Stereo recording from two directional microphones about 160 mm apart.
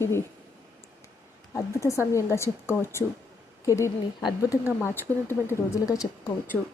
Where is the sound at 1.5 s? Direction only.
20° left (ahead or behind).